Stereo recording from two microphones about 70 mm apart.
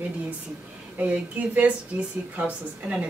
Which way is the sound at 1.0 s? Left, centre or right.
Centre.